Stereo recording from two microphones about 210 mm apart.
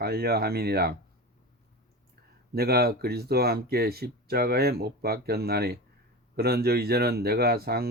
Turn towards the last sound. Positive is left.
turn(degrees=-50)  # may be behind; listen again after turning